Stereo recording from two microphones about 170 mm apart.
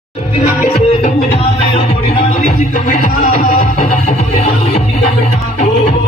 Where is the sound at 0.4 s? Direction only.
40° left (ahead or behind).